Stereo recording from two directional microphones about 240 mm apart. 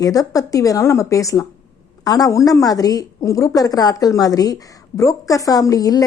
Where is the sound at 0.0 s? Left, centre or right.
Centre.